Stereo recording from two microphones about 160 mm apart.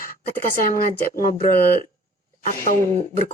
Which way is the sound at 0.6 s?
60° left (ahead or behind).